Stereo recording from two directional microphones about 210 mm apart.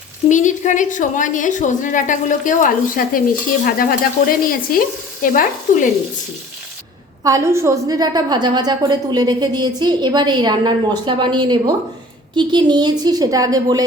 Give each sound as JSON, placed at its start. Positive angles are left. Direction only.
{"t": 0.3, "sound": "a woman's voice", "side_deg": 35}
{"t": 7.3, "sound": "a woman's voice", "side_deg": -15}